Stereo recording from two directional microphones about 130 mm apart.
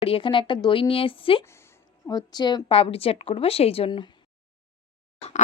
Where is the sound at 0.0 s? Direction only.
45° left (ahead or behind).